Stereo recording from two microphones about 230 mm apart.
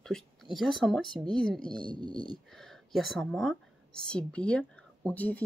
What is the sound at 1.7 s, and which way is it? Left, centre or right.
Speech, centre.